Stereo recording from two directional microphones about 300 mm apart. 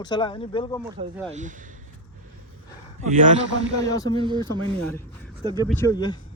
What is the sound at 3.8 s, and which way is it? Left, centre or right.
Speech, centre.